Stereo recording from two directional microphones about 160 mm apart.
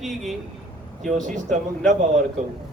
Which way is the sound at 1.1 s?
50° right (ahead or behind).